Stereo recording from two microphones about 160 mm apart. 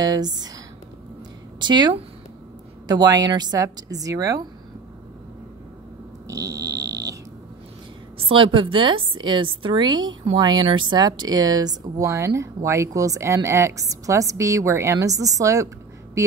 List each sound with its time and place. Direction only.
0.0 s speech: 25° right (ahead or behind)
1.6 s speech: 30° right (ahead or behind)
6.2 s speech: 20° right (ahead or behind)
8.3 s a woman's voice: 35° right (ahead or behind)